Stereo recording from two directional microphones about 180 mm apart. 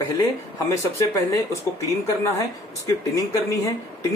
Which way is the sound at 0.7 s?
20° left (ahead or behind).